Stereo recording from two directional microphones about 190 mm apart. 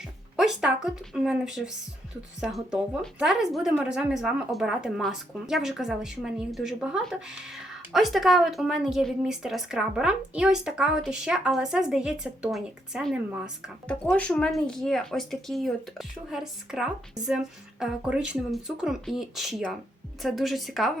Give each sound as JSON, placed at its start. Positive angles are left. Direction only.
{"t": 0.0, "sound": "a woman's voice", "side_deg": 0}